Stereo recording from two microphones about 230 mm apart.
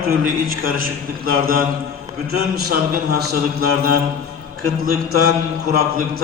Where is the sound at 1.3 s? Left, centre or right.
Right.